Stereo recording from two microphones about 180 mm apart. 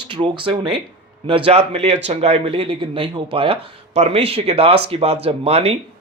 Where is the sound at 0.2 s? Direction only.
30° right (ahead or behind).